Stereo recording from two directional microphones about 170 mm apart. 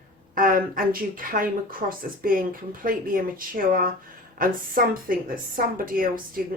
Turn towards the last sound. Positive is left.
turn(degrees=-55)  # may be behind; listen again after turning